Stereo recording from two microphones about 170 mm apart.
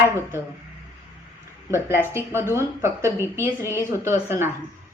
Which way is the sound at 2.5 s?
15° right (ahead or behind).